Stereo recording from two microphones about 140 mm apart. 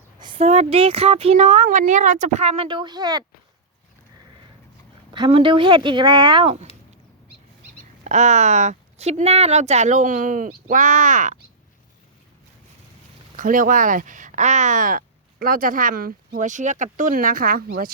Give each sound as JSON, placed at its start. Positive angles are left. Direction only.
{"t": 0.2, "sound": "a sound", "side_deg": -35}
{"t": 0.4, "sound": "speech", "side_deg": -50}
{"t": 2.6, "sound": "speech", "side_deg": -35}
{"t": 5.1, "sound": "speech", "side_deg": -35}
{"t": 8.0, "sound": "speech", "side_deg": -60}
{"t": 13.3, "sound": "speech", "side_deg": -75}